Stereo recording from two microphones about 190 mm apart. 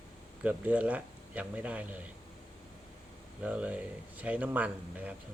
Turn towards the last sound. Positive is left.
turn(degrees=-10)  # may be behind; listen again after turning